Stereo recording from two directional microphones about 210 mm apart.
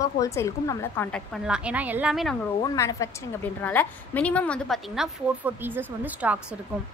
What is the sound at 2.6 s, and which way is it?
A woman's voice, 15° left (ahead or behind).